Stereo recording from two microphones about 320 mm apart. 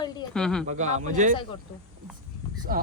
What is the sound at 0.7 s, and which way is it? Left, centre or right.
Speech, right.